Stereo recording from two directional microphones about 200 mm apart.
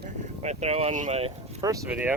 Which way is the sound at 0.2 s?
35° right (ahead or behind).